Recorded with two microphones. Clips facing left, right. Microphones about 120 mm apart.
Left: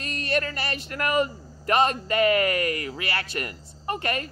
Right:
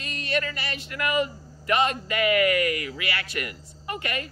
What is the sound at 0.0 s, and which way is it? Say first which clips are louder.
Speech: left 2 dB; 45° left (ahead or behind).